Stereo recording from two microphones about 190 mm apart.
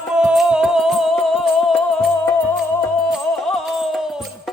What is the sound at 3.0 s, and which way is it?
Music, centre (ahead or behind).